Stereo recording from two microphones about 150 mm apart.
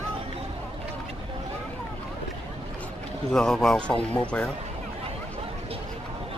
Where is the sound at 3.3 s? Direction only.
5° left (ahead or behind).